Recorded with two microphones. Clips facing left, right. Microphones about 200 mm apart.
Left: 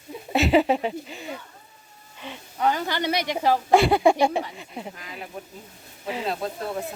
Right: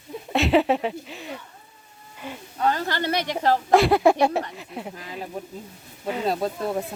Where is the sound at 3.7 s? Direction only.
Centre (ahead or behind).